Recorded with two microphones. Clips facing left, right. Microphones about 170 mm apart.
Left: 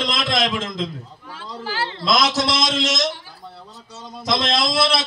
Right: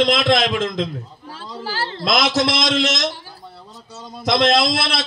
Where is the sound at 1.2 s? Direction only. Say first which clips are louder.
Even; 35° right (ahead or behind).